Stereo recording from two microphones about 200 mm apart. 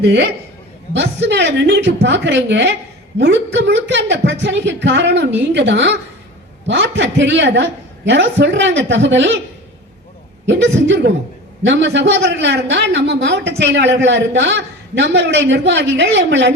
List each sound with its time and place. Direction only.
0.0 s a man's voice: 55° right (ahead or behind)
10.4 s a man's voice: 65° right (ahead or behind)